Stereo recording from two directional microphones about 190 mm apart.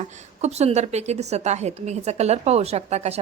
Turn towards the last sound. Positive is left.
turn(degrees=-35)  # may be behind; listen again after turning